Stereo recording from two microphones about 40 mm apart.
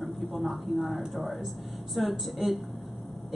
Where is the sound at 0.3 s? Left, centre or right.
Centre.